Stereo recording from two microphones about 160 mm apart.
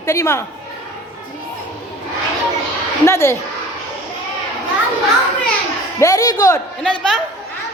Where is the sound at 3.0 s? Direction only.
15° left (ahead or behind).